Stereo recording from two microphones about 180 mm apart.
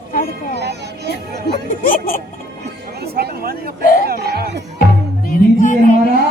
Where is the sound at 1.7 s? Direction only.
50° left (ahead or behind).